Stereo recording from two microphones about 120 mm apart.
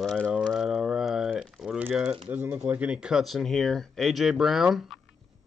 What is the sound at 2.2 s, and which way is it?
Speech, 15° right (ahead or behind).